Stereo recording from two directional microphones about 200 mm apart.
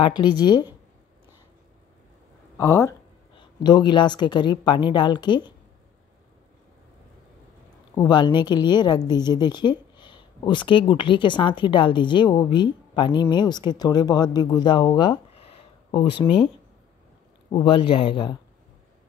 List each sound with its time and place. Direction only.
0.2 s a woman's voice: 20° left (ahead or behind)
2.5 s a woman's voice: 15° left (ahead or behind)
7.9 s a woman's voice: 25° left (ahead or behind)
17.5 s a woman's voice: 25° left (ahead or behind)